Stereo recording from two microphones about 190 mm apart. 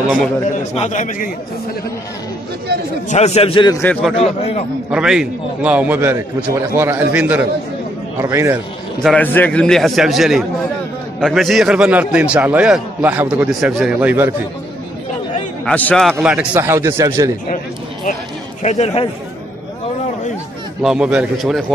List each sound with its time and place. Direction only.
0.7 s a man's voice: 40° left (ahead or behind)
2.7 s a man's voice: 55° right (ahead or behind)
3.1 s a man's voice: 35° left (ahead or behind)
3.7 s a man's voice: 10° left (ahead or behind)
4.2 s a man's voice: 30° left (ahead or behind)
4.9 s a man's voice: 5° right (ahead or behind)
9.0 s a man's voice: 10° left (ahead or behind); by 14.3 s 10° right (ahead or behind)
15.6 s a man's voice: 5° left (ahead or behind); by 17.3 s 15° right (ahead or behind)
18.6 s a man's voice: 35° left (ahead or behind)
20.8 s a man's voice: 5° right (ahead or behind)